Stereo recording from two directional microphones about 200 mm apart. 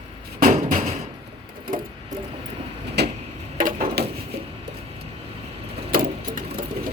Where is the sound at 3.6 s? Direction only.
45° right (ahead or behind).